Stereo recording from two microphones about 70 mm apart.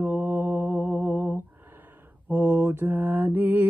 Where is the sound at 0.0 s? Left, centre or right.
Right.